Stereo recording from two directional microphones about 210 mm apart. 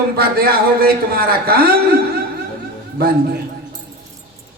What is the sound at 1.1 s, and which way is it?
Speech, 45° right (ahead or behind).